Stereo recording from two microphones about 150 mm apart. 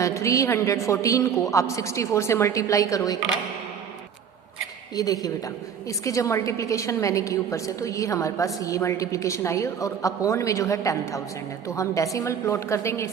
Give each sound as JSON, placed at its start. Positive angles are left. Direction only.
{"t": 0.0, "sound": "a woman's voice", "side_deg": 20}
{"t": 4.9, "sound": "a woman's voice", "side_deg": 25}